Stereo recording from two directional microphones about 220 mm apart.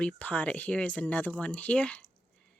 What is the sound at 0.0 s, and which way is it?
Speech, 5° left (ahead or behind).